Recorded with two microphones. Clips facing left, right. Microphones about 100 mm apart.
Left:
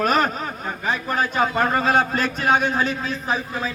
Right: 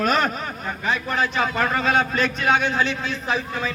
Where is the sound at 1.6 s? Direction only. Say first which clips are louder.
Left 1 dB; 30° left (ahead or behind).